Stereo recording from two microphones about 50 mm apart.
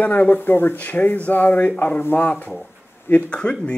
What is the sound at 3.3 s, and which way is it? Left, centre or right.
Speech, left.